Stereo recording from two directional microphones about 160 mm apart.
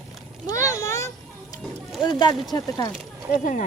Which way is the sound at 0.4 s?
20° left (ahead or behind).